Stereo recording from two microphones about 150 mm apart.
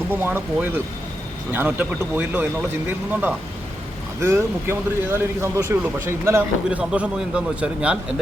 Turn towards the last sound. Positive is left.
turn(degrees=-5)  # may be behind; listen again after turning